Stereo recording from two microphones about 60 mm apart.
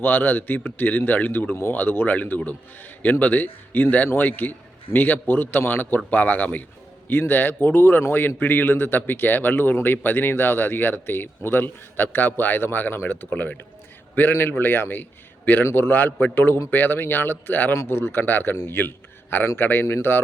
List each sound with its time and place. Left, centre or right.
0.0 s speech: left
13.3 s speech: left
14.2 s a man's voice: left